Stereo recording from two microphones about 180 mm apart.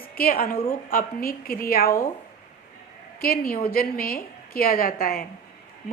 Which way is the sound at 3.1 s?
55° left (ahead or behind).